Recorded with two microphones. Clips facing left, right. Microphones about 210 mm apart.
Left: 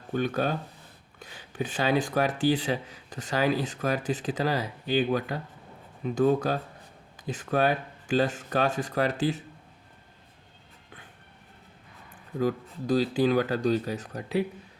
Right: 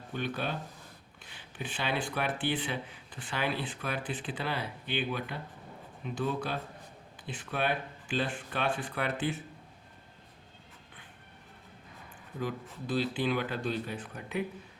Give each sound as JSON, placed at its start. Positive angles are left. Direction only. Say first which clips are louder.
{"t": 0.1, "sound": "speech", "louder": "left 7 dB", "side_deg": 45}
{"t": 12.4, "sound": "speech", "louder": "left 8 dB", "side_deg": 40}